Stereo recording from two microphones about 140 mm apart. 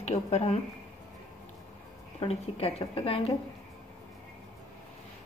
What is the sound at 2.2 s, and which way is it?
A woman's voice, 45° left (ahead or behind).